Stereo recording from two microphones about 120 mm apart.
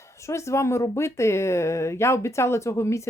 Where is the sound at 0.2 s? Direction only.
25° left (ahead or behind).